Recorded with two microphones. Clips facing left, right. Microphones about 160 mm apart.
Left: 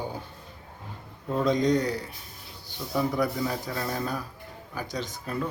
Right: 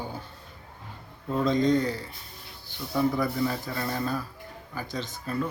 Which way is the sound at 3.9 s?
10° left (ahead or behind).